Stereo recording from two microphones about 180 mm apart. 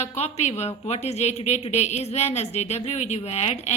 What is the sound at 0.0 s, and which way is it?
A woman's voice, 40° left (ahead or behind).